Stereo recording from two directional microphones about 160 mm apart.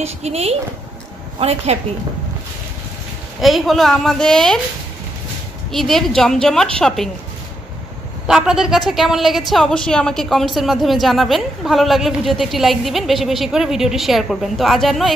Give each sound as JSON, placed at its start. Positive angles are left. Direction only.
{"t": 0.0, "sound": "speech", "side_deg": -40}
{"t": 3.3, "sound": "a woman's voice", "side_deg": 0}
{"t": 5.7, "sound": "a woman's voice", "side_deg": 0}
{"t": 8.3, "sound": "a woman's voice", "side_deg": -5}